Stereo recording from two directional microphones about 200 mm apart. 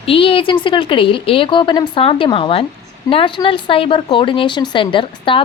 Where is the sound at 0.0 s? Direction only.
25° left (ahead or behind).